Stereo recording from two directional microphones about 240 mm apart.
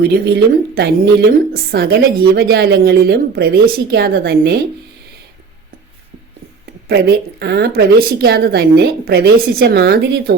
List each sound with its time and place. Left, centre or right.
0.3 s a woman's voice: right
6.8 s a woman's voice: right